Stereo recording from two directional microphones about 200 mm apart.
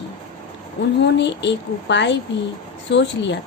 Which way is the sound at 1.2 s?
60° left (ahead or behind).